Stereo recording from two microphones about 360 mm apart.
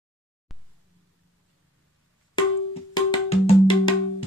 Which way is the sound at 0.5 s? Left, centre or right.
Centre.